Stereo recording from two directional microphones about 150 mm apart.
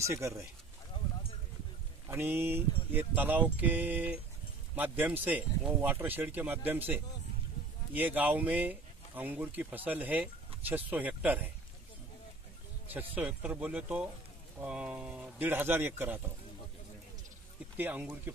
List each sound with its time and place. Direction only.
0.0 s speech: 20° right (ahead or behind)
2.0 s speech: 15° right (ahead or behind)
12.9 s speech: 10° right (ahead or behind)
17.7 s speech: 15° right (ahead or behind)